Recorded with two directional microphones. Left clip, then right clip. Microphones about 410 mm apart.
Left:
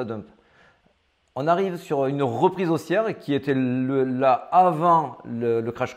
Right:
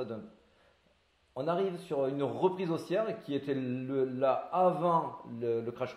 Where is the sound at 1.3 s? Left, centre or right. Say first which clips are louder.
Left 10 dB; left.